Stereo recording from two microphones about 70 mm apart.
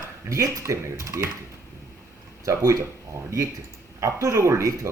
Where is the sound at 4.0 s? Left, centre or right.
Right.